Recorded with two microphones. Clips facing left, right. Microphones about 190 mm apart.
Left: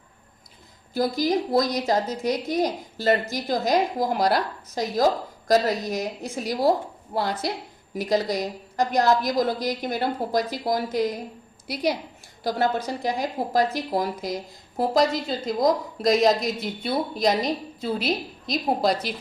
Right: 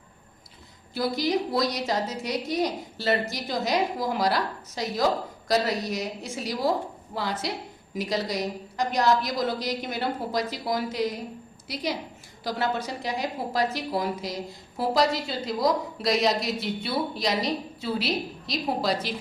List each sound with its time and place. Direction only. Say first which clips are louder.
0.9 s a woman's voice: left 3 dB; 45° left (ahead or behind)
7.9 s a woman's voice: left 4 dB; 50° left (ahead or behind)
11.7 s a woman's voice: left 5 dB; 60° left (ahead or behind)
12.5 s a woman's voice: left 4 dB; 45° left (ahead or behind)